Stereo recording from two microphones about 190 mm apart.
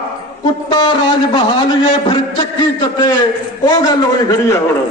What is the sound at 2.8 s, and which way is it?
A man's voice, 25° left (ahead or behind).